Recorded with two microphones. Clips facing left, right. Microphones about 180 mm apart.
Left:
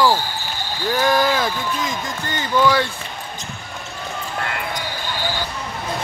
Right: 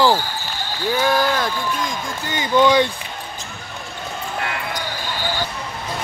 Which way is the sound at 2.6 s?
20° right (ahead or behind).